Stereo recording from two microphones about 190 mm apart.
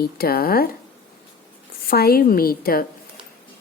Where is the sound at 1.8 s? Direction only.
55° left (ahead or behind).